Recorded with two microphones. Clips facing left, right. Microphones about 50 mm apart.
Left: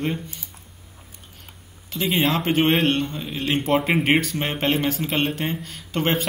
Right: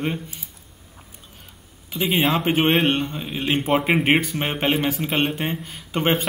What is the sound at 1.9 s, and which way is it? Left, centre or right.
Speech, centre.